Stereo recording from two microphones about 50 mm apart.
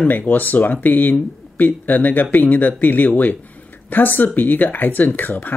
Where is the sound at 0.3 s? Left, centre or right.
Left.